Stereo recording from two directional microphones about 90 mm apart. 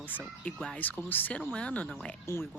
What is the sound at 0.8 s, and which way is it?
Speech, 20° left (ahead or behind).